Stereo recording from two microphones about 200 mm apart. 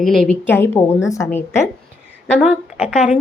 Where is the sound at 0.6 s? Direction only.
15° left (ahead or behind).